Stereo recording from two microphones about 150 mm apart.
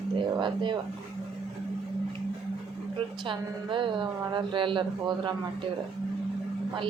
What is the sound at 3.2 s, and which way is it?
Speech, 35° right (ahead or behind).